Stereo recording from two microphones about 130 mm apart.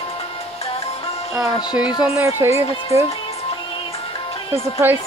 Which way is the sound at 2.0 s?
20° right (ahead or behind).